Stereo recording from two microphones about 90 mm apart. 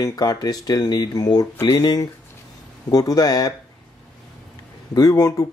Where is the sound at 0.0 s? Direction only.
45° left (ahead or behind).